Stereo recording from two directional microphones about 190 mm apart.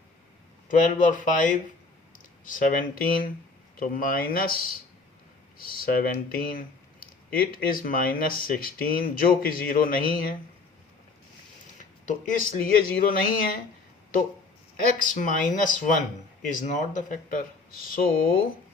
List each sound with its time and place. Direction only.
0.7 s speech: 45° left (ahead or behind)
5.5 s speech: 50° left (ahead or behind)
12.0 s speech: 45° left (ahead or behind)
14.8 s speech: 45° left (ahead or behind)